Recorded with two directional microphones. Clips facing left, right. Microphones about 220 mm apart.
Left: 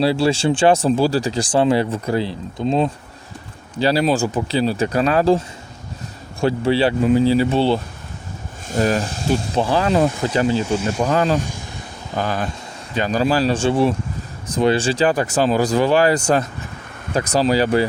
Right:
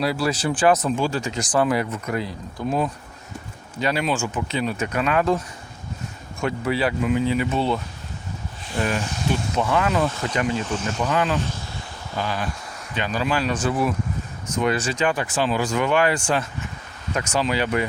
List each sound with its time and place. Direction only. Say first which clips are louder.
0.0 s speech: left 6 dB; 30° left (ahead or behind)
6.4 s speech: left 6 dB; 30° left (ahead or behind)
8.6 s speech: left 6 dB; 40° left (ahead or behind)
10.7 s speech: left 6 dB; 10° left (ahead or behind)
11.0 s speech: left 4 dB; 35° left (ahead or behind)
11.3 s speech: left 3 dB; 15° left (ahead or behind)
12.1 s speech: left 4 dB; 45° left (ahead or behind)